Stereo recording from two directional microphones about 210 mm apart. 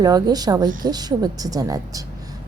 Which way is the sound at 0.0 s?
20° right (ahead or behind).